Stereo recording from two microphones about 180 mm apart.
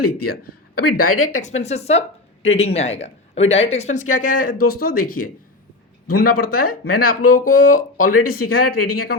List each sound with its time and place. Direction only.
0.0 s a woman's voice: 60° left (ahead or behind)